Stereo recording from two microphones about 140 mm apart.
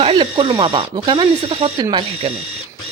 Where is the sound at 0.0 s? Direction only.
40° right (ahead or behind).